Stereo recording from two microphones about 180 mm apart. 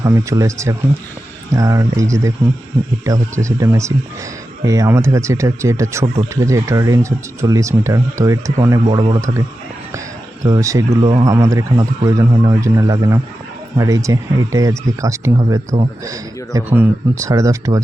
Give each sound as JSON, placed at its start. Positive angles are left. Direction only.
{"t": 0.0, "sound": "a man's voice", "side_deg": -20}
{"t": 10.4, "sound": "a man's voice", "side_deg": -20}